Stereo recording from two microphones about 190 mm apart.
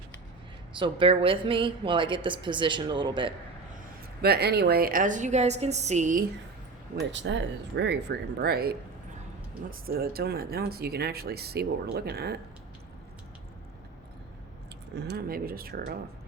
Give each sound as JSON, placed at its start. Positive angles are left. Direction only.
{"t": 0.8, "sound": "a woman's voice", "side_deg": -25}
{"t": 4.2, "sound": "a woman's voice", "side_deg": -55}
{"t": 7.1, "sound": "speech", "side_deg": -75}
{"t": 15.0, "sound": "a woman's voice", "side_deg": -55}